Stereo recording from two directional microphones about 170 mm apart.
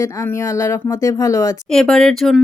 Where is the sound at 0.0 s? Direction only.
15° left (ahead or behind).